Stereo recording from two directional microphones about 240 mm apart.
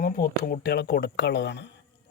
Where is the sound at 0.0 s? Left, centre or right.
Left.